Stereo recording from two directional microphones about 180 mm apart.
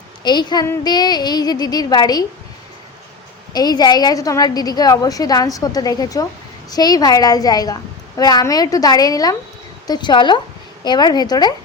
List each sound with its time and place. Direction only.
0.3 s a woman's voice: 25° left (ahead or behind)
3.5 s a woman's voice: 20° left (ahead or behind)